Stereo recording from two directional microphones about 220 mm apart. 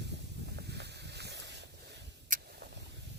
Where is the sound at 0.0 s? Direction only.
50° right (ahead or behind).